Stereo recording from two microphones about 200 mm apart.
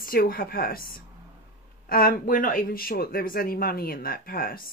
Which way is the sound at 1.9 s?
45° left (ahead or behind).